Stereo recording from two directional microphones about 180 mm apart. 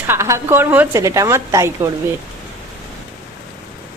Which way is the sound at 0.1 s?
15° right (ahead or behind).